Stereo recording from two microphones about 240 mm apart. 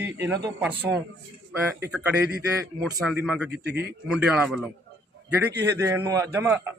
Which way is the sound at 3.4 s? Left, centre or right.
Right.